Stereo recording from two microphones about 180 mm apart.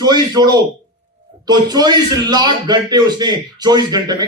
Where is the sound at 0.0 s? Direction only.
25° right (ahead or behind).